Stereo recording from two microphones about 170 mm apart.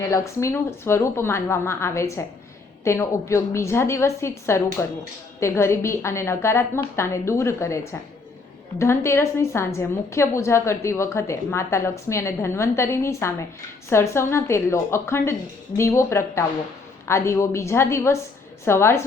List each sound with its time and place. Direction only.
0.1 s a woman's voice: 15° left (ahead or behind)